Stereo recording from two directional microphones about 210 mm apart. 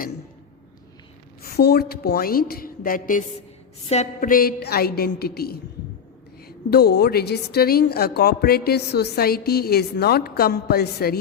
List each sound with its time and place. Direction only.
1.4 s a woman's voice: 50° left (ahead or behind)
6.7 s a woman's voice: 50° left (ahead or behind)